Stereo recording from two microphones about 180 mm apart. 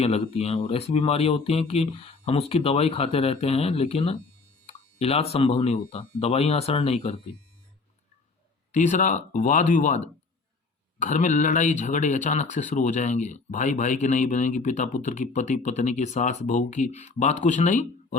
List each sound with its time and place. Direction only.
0.0 s speech: 35° left (ahead or behind)
8.7 s speech: 45° left (ahead or behind)
11.0 s speech: 40° left (ahead or behind)